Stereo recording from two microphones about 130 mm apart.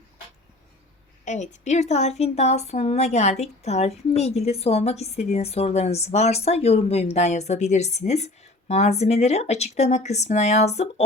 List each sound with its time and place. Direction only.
1.2 s a woman's voice: 70° left (ahead or behind)